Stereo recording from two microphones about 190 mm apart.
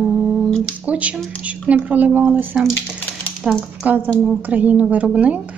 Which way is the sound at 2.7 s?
5° left (ahead or behind).